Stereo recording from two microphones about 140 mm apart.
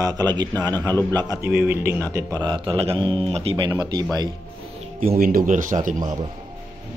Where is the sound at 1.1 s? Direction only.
25° right (ahead or behind).